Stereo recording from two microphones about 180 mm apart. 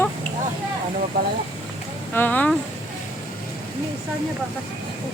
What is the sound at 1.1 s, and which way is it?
Speech, 55° right (ahead or behind).